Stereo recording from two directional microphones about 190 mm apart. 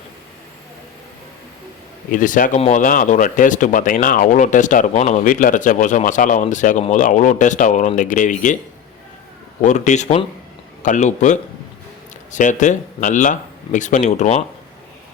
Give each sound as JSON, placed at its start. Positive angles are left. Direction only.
{"t": 2.0, "sound": "speech", "side_deg": 45}
{"t": 9.6, "sound": "speech", "side_deg": 40}